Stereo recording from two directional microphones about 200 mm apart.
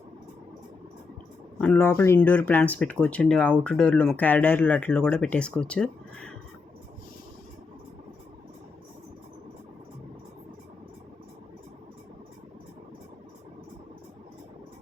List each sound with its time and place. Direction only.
1.6 s speech: 10° left (ahead or behind)